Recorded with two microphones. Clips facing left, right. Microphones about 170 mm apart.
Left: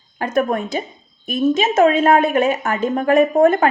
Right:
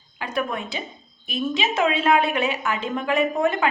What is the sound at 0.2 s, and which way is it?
A woman's voice, 45° left (ahead or behind).